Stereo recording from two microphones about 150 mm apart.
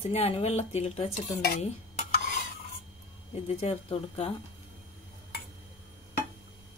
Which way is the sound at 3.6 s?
40° left (ahead or behind).